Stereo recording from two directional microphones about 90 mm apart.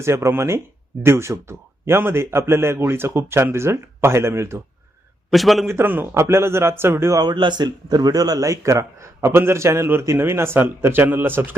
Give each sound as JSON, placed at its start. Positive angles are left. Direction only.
{"t": 0.0, "sound": "a man's voice", "side_deg": -30}
{"t": 5.3, "sound": "a man's voice", "side_deg": 0}
{"t": 5.6, "sound": "a man's voice", "side_deg": -25}
{"t": 7.2, "sound": "a man's voice", "side_deg": -55}